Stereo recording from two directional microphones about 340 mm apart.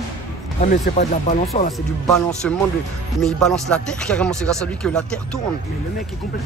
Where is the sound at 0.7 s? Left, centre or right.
Left.